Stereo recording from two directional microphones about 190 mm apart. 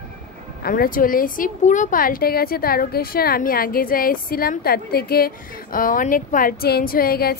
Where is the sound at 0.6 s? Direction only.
50° left (ahead or behind).